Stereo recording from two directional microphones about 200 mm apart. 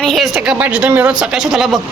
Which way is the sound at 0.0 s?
Centre (ahead or behind).